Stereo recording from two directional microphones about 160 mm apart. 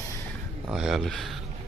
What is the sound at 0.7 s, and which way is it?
Speech, 5° right (ahead or behind).